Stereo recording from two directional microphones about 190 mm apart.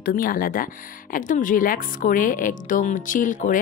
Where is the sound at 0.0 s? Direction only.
50° left (ahead or behind).